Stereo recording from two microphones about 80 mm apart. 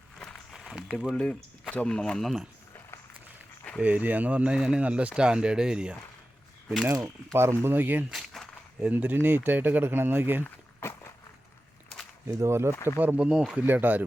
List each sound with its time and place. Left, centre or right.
0.7 s a sound: centre
1.1 s speech: centre
3.8 s speech: centre
6.8 s speech: right
7.6 s speech: right
8.1 s a sound: centre
8.8 s speech: centre
10.4 s a sound: left
12.3 s speech: right
13.0 s speech: centre